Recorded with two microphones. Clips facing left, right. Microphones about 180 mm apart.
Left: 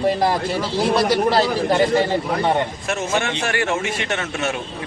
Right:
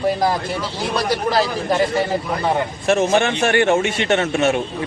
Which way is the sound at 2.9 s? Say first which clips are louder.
Right 8 dB; 30° right (ahead or behind).